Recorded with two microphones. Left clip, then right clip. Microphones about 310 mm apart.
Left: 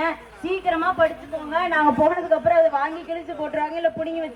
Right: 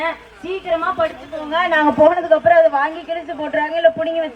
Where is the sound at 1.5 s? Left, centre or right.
Right.